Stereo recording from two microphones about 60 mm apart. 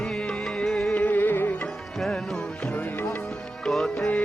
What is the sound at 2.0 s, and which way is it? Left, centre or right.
Music, centre.